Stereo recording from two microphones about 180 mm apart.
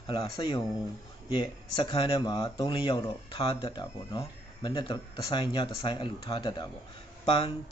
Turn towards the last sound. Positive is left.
turn(degrees=25)  # may be behind; listen again after turning